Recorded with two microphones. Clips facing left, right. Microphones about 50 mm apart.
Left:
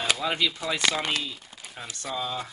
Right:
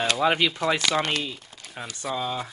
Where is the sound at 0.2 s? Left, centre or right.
Right.